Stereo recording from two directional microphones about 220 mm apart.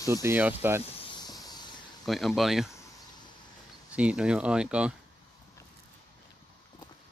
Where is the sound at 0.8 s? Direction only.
25° left (ahead or behind).